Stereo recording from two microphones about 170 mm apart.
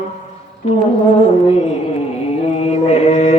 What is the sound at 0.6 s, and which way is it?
Music, 35° left (ahead or behind).